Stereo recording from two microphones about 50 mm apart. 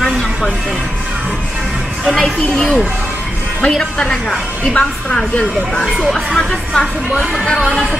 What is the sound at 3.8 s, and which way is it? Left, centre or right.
A woman's voice, centre.